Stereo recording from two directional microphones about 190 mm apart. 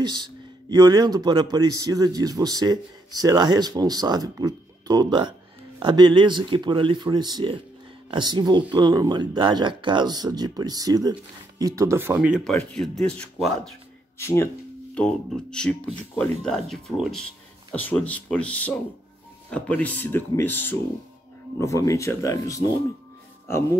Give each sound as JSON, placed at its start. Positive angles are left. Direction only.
{"t": 0.0, "sound": "speech", "side_deg": -20}
{"t": 14.1, "sound": "speech", "side_deg": 15}